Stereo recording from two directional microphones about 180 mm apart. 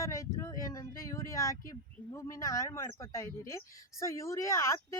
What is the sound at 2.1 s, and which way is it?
Speech, 15° left (ahead or behind).